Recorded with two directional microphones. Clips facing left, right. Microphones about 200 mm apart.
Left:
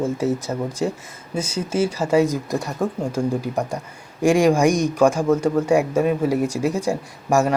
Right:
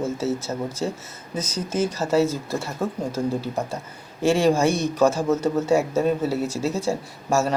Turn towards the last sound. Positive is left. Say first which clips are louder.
# left 3 dB
turn(degrees=15)  # may be behind; listen again after turning